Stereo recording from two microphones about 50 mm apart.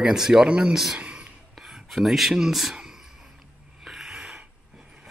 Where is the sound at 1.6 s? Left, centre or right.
Centre.